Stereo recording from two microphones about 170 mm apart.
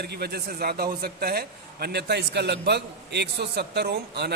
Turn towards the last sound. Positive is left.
turn(degrees=-70)  # may be behind; listen again after turning